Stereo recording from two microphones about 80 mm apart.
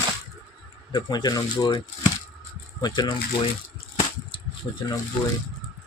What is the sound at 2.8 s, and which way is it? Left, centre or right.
Speech, left.